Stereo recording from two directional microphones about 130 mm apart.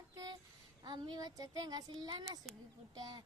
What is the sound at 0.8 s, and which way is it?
Speech, 30° right (ahead or behind).